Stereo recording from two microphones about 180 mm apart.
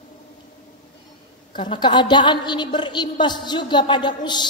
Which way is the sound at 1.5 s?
25° left (ahead or behind).